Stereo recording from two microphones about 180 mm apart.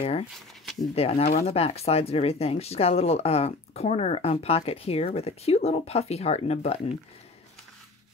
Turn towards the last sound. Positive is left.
turn(degrees=35)  # may be behind; listen again after turning